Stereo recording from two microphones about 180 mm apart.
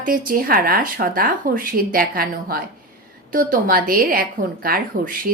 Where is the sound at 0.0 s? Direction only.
50° right (ahead or behind).